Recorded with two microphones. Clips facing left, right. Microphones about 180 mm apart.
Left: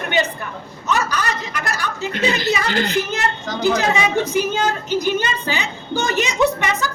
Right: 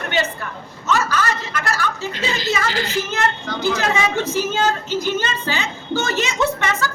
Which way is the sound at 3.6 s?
15° left (ahead or behind).